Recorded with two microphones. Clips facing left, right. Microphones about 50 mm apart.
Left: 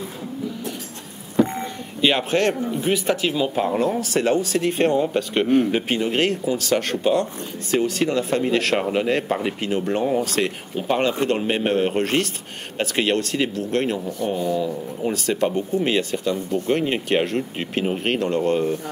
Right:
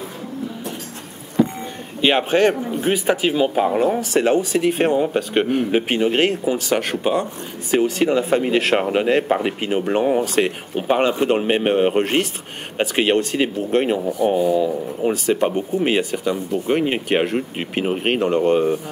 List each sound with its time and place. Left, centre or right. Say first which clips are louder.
2.0 s speech: right 3 dB; right